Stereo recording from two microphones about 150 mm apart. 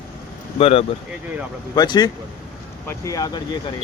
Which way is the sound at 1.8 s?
25° left (ahead or behind).